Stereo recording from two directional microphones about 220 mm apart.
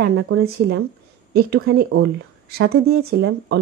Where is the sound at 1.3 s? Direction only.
45° right (ahead or behind).